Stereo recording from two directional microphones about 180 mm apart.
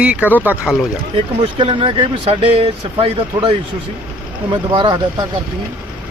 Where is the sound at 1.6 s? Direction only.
30° right (ahead or behind).